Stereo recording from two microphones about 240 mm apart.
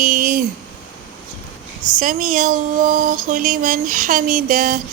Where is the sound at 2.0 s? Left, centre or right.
Right.